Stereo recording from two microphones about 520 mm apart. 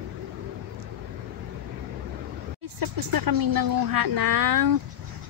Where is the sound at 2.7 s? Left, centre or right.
Right.